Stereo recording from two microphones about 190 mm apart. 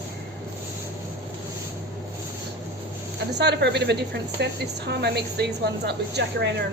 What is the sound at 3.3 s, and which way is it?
Speech, 60° right (ahead or behind).